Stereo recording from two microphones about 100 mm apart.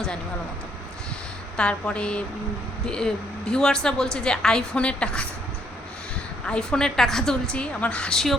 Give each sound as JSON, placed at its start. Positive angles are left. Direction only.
{"t": 1.5, "sound": "a woman's voice", "side_deg": 10}
{"t": 6.4, "sound": "a woman's voice", "side_deg": 5}